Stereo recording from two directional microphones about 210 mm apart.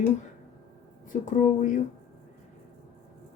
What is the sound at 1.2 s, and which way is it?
Speech, 35° left (ahead or behind).